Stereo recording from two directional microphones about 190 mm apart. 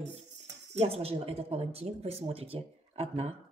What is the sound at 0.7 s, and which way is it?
A woman's voice, 30° right (ahead or behind).